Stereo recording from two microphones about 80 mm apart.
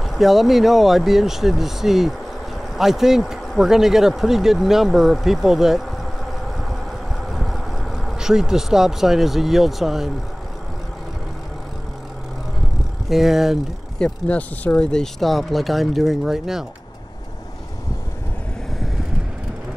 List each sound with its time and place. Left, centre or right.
0.0 s speech: centre
7.2 s vehicle: centre
8.2 s speech: centre
13.1 s speech: centre
13.9 s speech: centre